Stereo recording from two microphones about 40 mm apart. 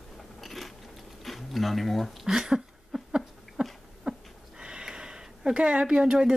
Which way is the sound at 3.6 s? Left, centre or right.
Right.